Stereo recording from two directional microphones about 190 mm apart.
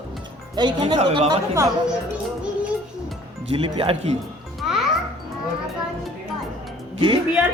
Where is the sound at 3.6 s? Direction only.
30° right (ahead or behind).